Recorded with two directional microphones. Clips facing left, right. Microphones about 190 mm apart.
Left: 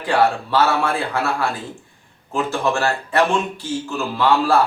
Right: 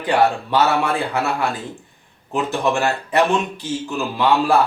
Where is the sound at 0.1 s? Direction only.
15° right (ahead or behind).